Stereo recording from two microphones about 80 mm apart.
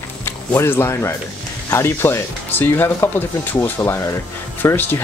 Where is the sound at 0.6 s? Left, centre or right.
Left.